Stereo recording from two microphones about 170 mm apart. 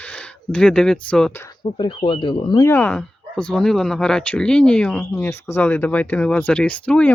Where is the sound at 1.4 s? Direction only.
25° left (ahead or behind).